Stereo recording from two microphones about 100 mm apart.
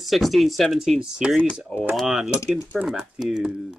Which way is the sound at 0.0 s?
Centre (ahead or behind).